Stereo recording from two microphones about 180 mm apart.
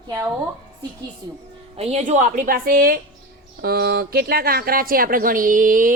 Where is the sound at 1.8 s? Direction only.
35° right (ahead or behind).